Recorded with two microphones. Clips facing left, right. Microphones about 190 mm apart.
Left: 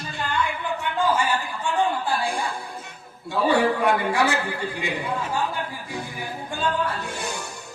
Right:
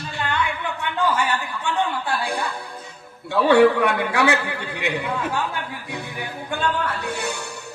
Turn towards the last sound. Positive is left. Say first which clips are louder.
# right 1 dB
turn(degrees=-65)  # may be behind; listen again after turning